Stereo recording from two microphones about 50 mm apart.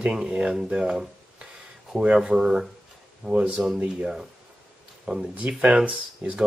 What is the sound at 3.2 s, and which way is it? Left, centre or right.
Speech, right.